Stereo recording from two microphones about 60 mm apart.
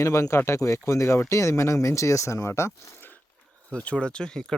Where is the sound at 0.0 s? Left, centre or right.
Left.